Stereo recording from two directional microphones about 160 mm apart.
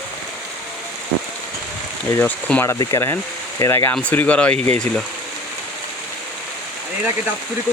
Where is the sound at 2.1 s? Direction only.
10° left (ahead or behind).